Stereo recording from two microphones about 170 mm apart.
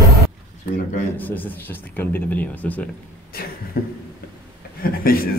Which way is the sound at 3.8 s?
65° left (ahead or behind).